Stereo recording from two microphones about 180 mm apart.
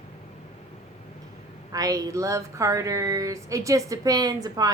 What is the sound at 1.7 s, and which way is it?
Speech, 20° right (ahead or behind).